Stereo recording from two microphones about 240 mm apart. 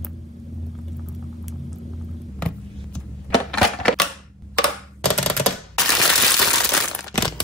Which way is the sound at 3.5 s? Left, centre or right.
Centre.